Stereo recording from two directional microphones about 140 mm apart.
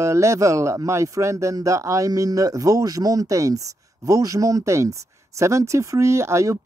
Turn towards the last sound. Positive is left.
turn(degrees=-20)  # may be behind; listen again after turning